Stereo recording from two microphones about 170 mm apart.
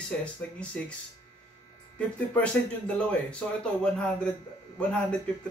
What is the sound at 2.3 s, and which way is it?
A man's voice, 5° left (ahead or behind).